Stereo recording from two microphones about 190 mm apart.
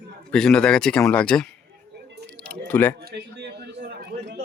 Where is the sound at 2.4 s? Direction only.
10° left (ahead or behind).